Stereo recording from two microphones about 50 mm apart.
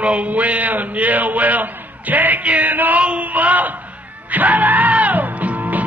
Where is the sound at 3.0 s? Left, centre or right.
Right.